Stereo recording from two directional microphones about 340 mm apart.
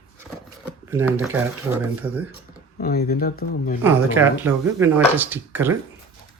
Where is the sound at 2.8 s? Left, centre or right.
Left.